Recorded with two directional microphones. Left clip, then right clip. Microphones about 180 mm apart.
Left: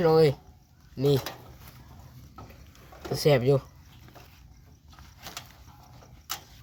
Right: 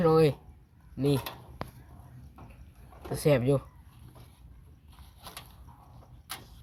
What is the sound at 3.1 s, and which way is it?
Speech, 55° left (ahead or behind).